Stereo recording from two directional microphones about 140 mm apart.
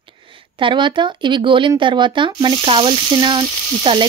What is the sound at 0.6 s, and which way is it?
Sizzle, 35° right (ahead or behind).